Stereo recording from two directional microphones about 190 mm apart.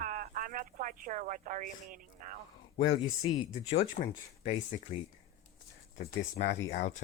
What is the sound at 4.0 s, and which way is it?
Speech, 30° left (ahead or behind).